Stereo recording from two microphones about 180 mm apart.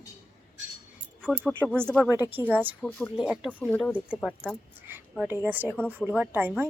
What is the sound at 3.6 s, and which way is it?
Speech, 5° left (ahead or behind).